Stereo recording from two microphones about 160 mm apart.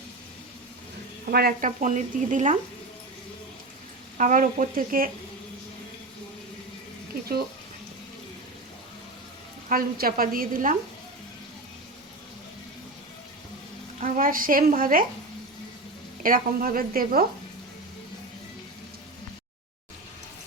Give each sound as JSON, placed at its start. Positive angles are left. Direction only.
{"t": 1.3, "sound": "speech", "side_deg": -70}
{"t": 4.2, "sound": "speech", "side_deg": -55}
{"t": 9.6, "sound": "speech", "side_deg": -65}
{"t": 14.0, "sound": "speech", "side_deg": -60}
{"t": 16.2, "sound": "speech", "side_deg": -60}